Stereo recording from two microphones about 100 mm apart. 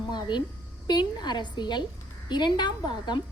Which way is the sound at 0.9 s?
45° left (ahead or behind).